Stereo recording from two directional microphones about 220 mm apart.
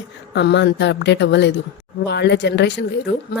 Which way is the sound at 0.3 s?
50° left (ahead or behind).